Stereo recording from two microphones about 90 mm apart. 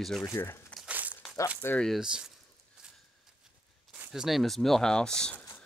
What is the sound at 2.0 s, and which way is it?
Speech, 10° right (ahead or behind).